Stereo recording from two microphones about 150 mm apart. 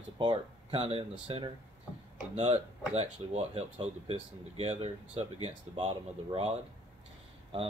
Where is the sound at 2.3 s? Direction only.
45° right (ahead or behind).